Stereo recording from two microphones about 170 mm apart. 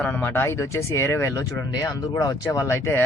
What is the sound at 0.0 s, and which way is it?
Speech, 10° left (ahead or behind).